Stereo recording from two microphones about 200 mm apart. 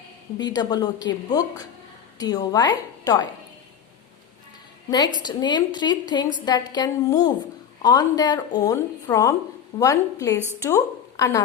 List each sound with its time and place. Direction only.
0.3 s speech: 20° left (ahead or behind)
4.9 s a woman's voice: 20° left (ahead or behind)